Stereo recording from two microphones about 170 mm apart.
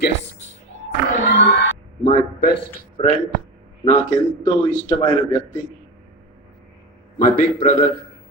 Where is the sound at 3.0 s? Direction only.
35° left (ahead or behind).